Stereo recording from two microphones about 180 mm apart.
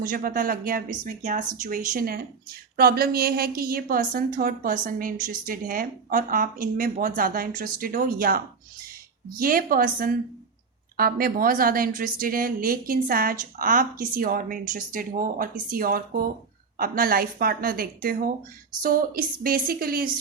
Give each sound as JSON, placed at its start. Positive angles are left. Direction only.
{"t": 0.0, "sound": "a woman's voice", "side_deg": -50}